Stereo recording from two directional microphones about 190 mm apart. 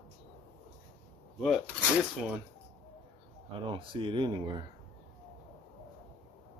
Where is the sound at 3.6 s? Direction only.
25° right (ahead or behind).